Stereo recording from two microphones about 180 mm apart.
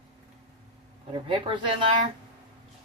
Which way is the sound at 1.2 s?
30° right (ahead or behind).